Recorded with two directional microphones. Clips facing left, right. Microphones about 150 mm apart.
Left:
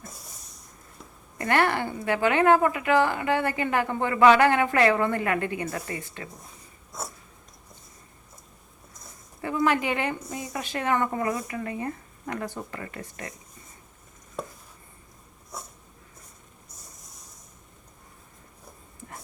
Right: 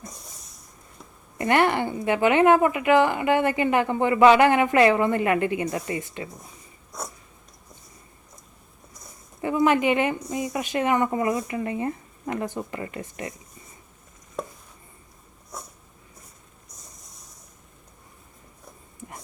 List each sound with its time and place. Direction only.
1.4 s speech: 20° right (ahead or behind)
9.4 s speech: 20° right (ahead or behind)